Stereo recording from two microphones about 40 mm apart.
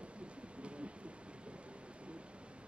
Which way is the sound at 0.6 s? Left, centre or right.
Right.